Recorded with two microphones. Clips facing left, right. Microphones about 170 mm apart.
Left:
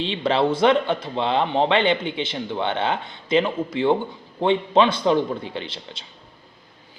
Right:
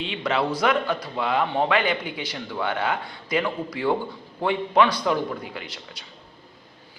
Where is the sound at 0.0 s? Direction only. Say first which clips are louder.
Left 4 dB; 30° left (ahead or behind).